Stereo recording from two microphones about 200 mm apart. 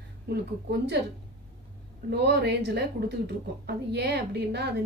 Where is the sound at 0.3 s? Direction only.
55° right (ahead or behind).